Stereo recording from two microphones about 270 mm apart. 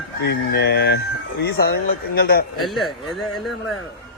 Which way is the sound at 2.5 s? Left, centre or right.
Centre.